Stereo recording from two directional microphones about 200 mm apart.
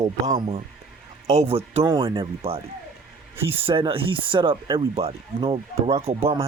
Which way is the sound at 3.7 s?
25° right (ahead or behind).